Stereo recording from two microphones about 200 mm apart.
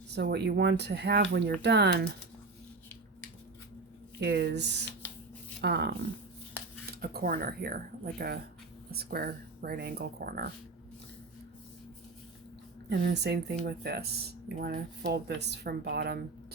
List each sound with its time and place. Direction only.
0.1 s speech: 55° right (ahead or behind)
4.2 s speech: 55° right (ahead or behind)
7.0 s speech: 50° right (ahead or behind)
12.9 s speech: 55° right (ahead or behind)